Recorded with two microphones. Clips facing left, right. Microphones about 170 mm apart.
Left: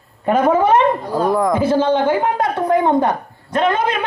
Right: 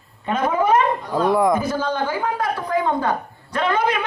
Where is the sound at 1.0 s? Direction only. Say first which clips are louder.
Left 2 dB; 45° left (ahead or behind).